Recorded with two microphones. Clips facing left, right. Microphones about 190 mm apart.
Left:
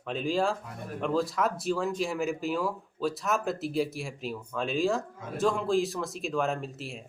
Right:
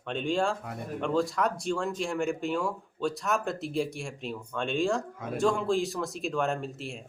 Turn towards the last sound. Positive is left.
turn(degrees=0)  # may be behind; listen again after turning